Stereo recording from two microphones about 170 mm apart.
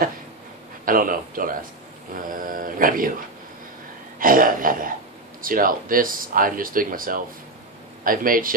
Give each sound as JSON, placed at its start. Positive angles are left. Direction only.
{"t": 0.8, "sound": "speech", "side_deg": -55}
{"t": 4.2, "sound": "speech", "side_deg": -55}